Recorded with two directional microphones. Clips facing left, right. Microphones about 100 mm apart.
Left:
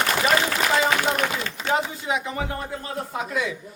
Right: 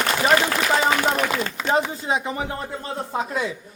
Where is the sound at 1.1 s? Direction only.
30° right (ahead or behind).